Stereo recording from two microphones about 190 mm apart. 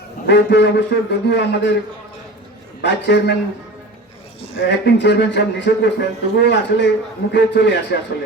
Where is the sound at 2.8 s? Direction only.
65° left (ahead or behind).